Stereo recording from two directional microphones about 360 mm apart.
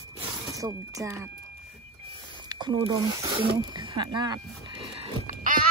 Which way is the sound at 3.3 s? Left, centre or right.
Centre.